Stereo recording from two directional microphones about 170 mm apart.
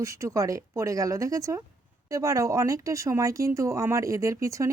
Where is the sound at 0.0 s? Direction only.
15° right (ahead or behind).